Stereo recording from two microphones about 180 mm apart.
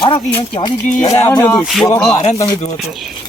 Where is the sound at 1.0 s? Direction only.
40° left (ahead or behind).